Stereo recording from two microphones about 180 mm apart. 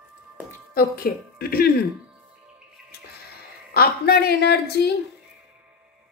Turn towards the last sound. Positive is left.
turn(degrees=65)  # may be behind; listen again after turning